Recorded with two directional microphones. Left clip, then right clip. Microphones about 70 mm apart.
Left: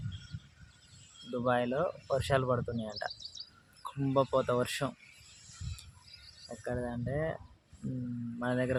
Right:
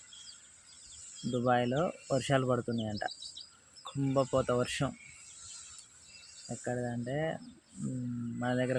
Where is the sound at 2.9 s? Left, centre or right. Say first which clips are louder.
Right 1 dB; left.